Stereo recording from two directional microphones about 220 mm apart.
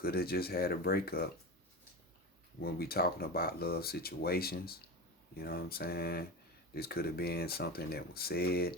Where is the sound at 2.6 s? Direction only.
45° left (ahead or behind).